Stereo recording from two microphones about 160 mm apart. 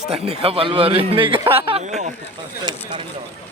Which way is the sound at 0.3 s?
35° right (ahead or behind).